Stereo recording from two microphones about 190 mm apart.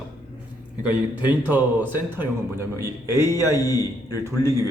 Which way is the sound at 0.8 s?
10° right (ahead or behind).